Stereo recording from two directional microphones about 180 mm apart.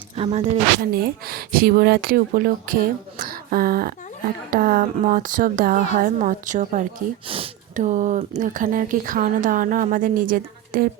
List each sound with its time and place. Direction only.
0.2 s speech: 35° right (ahead or behind)
0.8 s speech: 60° right (ahead or behind)
3.2 s a sound: 55° right (ahead or behind)
4.5 s speech: 50° right (ahead or behind)
7.3 s a sound: 30° right (ahead or behind)
7.8 s speech: 45° right (ahead or behind)